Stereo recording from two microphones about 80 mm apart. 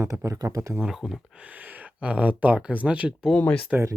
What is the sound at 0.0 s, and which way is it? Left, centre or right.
Speech, right.